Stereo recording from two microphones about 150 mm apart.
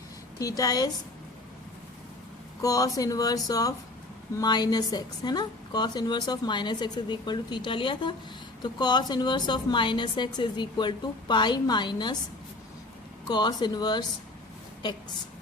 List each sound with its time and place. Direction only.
0.3 s a woman's voice: 25° left (ahead or behind)
2.6 s a woman's voice: 25° left (ahead or behind)
13.2 s a woman's voice: 25° left (ahead or behind)